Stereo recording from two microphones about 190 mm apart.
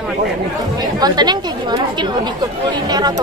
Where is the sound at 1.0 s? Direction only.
20° right (ahead or behind).